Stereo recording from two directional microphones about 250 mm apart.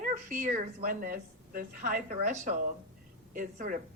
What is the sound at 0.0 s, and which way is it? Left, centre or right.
A woman's voice, right.